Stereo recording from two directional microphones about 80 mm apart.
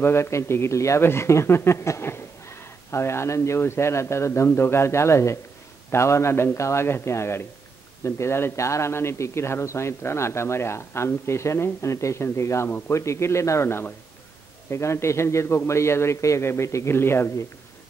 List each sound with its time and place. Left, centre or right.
0.0 s speech: left
12.6 s a man's voice: left
12.9 s speech: left